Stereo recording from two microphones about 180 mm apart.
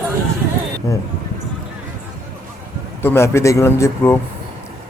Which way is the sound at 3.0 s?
15° left (ahead or behind).